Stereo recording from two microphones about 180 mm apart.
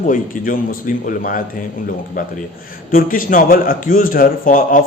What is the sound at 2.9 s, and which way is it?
A man's voice, 50° left (ahead or behind).